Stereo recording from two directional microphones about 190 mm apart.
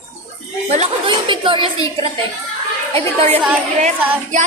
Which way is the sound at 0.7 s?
30° right (ahead or behind).